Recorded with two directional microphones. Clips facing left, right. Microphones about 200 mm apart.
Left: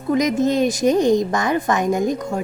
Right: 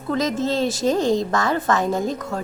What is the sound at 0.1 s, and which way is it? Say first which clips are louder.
A woman's voice: left 4 dB; 15° left (ahead or behind).